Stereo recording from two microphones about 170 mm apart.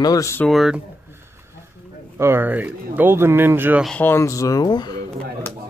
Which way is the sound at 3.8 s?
10° left (ahead or behind).